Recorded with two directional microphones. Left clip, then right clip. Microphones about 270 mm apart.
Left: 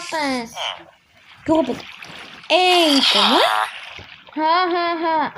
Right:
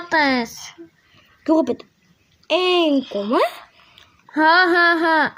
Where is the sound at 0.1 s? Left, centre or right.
Right.